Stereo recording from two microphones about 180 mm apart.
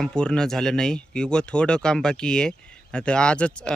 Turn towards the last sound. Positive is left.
turn(degrees=5)  # may be behind; listen again after turning